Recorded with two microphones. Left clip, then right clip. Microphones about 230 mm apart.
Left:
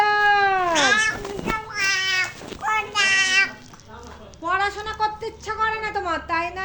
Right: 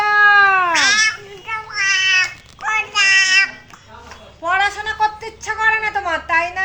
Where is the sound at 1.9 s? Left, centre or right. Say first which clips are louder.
Right 7 dB; centre.